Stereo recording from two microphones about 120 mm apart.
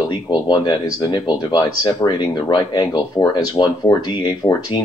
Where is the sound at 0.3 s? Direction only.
40° left (ahead or behind).